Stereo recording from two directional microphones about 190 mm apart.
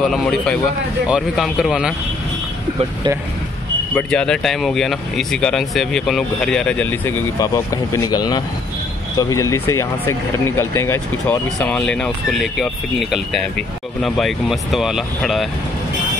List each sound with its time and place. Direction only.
1.0 s speech: centre (ahead or behind)
3.9 s speech: 5° left (ahead or behind)